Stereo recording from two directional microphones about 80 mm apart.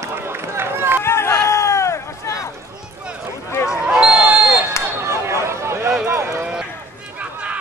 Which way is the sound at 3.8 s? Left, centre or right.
Centre.